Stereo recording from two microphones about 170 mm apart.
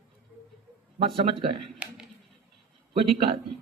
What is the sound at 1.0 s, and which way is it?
Speech, 30° right (ahead or behind).